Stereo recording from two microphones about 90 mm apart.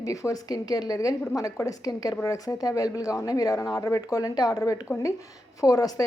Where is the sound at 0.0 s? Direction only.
40° left (ahead or behind).